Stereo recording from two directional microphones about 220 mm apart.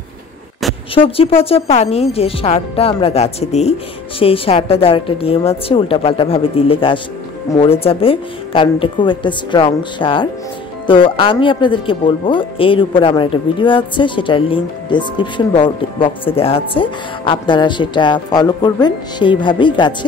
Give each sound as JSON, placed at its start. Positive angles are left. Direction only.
{"t": 0.9, "sound": "speech", "side_deg": 25}